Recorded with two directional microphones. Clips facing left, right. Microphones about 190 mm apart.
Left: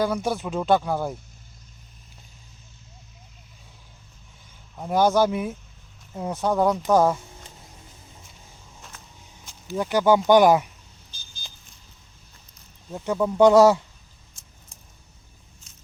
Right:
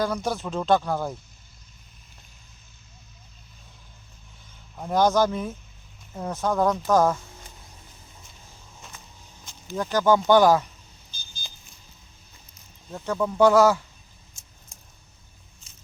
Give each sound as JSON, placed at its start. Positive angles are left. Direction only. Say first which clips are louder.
{"t": 0.0, "sound": "speech", "louder": "left 2 dB", "side_deg": 10}
{"t": 4.8, "sound": "speech", "louder": "left 1 dB", "side_deg": 5}
{"t": 9.7, "sound": "speech", "louder": "left 2 dB", "side_deg": 10}
{"t": 12.9, "sound": "speech", "louder": "left 2 dB", "side_deg": 15}